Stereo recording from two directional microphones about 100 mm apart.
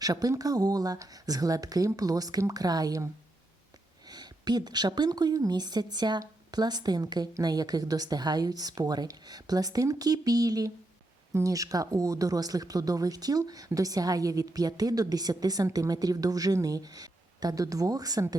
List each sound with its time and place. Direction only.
0.0 s speech: 40° right (ahead or behind)
4.1 s speech: 45° right (ahead or behind)